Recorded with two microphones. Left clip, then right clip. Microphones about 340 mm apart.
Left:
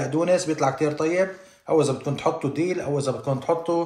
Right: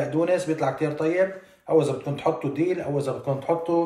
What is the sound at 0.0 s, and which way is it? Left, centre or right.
A man's voice, centre.